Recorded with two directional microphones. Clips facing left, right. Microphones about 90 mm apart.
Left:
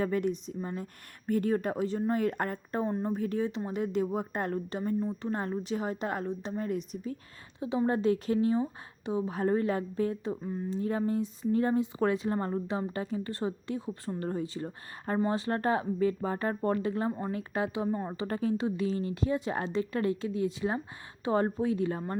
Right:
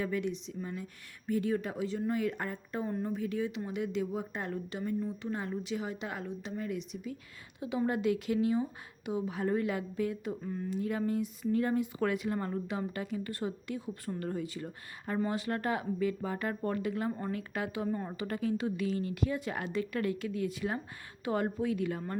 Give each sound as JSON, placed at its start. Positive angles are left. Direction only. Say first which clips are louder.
{"t": 0.0, "sound": "speech", "louder": "left 4 dB", "side_deg": 45}
{"t": 2.8, "sound": "speech", "louder": "left 3 dB", "side_deg": 30}
{"t": 3.1, "sound": "a woman's voice", "louder": "left 3 dB", "side_deg": 40}
{"t": 7.6, "sound": "a woman's voice", "louder": "left 3 dB", "side_deg": 25}
{"t": 17.1, "sound": "speech", "louder": "left 2 dB", "side_deg": 20}